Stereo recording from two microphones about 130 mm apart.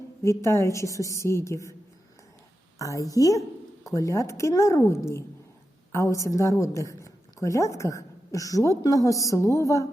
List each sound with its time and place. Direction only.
0.2 s a woman's voice: 20° left (ahead or behind)
2.7 s a woman's voice: 25° left (ahead or behind)